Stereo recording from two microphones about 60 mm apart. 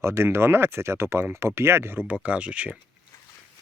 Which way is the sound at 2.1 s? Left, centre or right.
Right.